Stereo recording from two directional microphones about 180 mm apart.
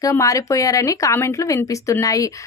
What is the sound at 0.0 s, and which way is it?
A woman's voice, 15° left (ahead or behind).